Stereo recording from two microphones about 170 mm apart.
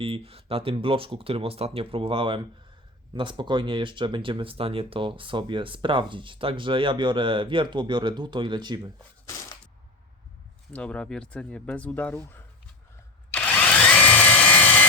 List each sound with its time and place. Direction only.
0.0 s speech: 35° right (ahead or behind)
10.7 s speech: 5° left (ahead or behind)
13.3 s drill: 10° left (ahead or behind)